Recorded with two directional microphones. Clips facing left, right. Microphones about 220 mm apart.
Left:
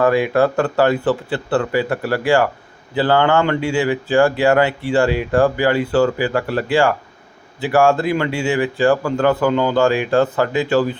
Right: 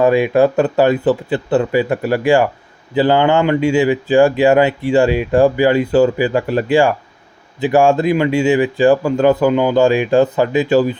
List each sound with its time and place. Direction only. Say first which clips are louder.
0.0 s speech: right 3 dB; 15° right (ahead or behind)